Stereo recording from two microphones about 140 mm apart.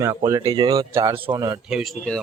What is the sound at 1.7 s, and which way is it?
Speech, centre (ahead or behind).